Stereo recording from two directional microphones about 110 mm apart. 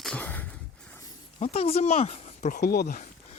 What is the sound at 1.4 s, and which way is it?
Speech, 70° left (ahead or behind).